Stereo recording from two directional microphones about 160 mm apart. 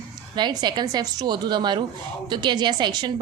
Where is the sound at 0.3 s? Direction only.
25° right (ahead or behind).